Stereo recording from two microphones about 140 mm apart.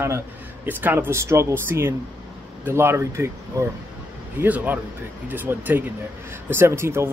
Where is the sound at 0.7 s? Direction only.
15° right (ahead or behind).